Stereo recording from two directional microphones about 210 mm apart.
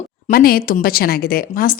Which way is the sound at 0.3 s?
45° left (ahead or behind).